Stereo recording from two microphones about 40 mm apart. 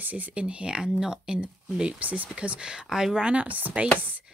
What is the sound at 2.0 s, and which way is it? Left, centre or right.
Speech, right.